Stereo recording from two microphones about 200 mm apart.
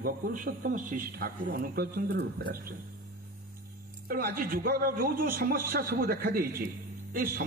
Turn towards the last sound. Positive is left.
turn(degrees=-45)  # may be behind; listen again after turning